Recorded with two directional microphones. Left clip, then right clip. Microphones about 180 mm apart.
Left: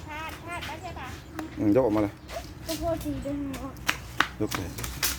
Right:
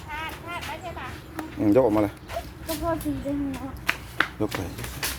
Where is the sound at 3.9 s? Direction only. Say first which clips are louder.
Right 2 dB; 40° left (ahead or behind).